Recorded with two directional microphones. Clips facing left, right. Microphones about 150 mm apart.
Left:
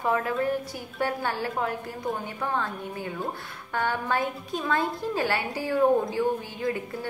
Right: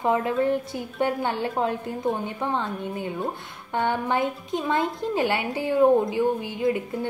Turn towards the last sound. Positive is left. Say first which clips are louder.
# right 5 dB
turn(degrees=-20)  # may be behind; listen again after turning